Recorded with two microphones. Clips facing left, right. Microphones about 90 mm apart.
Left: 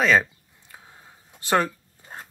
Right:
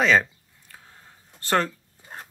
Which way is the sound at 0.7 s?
15° left (ahead or behind).